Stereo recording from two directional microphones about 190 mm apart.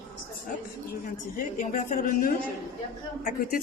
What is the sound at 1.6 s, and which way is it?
A man's voice, 40° left (ahead or behind).